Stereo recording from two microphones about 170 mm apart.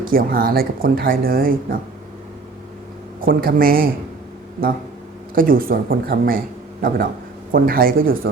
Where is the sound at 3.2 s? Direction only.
60° right (ahead or behind).